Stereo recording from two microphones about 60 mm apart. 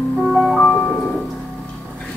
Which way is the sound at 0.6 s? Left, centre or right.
Centre.